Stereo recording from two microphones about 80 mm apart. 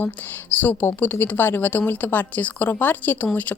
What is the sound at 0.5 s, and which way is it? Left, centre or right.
Speech, left.